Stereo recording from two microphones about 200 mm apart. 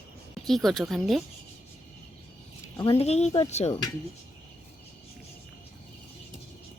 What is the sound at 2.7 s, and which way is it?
Speech, 20° left (ahead or behind).